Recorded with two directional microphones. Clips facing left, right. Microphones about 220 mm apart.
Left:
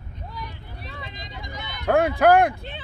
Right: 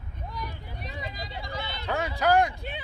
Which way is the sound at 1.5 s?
30° right (ahead or behind).